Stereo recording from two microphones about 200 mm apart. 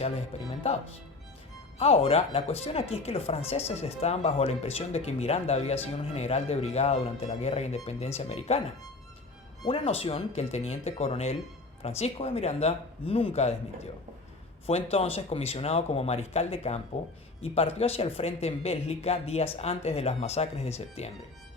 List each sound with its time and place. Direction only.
1.8 s speech: 30° left (ahead or behind)
9.6 s speech: 30° left (ahead or behind)
14.7 s speech: 30° left (ahead or behind)